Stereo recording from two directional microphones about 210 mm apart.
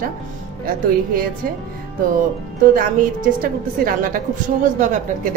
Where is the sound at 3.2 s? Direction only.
40° right (ahead or behind).